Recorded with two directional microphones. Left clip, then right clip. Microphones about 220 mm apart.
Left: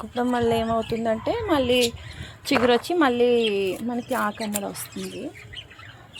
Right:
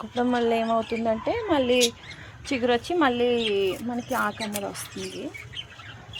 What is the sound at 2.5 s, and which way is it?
Speech, 45° left (ahead or behind).